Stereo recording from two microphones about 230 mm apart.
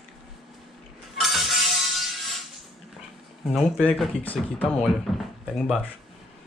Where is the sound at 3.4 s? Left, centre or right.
Centre.